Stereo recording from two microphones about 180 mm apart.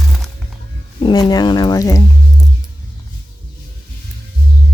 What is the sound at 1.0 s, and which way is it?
Speech, 20° left (ahead or behind).